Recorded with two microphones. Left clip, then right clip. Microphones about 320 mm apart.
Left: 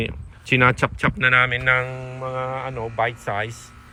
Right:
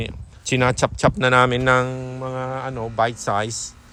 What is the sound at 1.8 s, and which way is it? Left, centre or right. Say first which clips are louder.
Mantra: right 1 dB; right.